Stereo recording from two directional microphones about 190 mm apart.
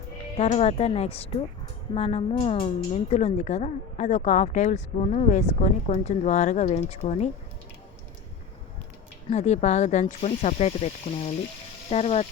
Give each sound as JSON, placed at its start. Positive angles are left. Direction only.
{"t": 0.3, "sound": "a woman's voice", "side_deg": 35}
{"t": 9.3, "sound": "a woman's voice", "side_deg": 35}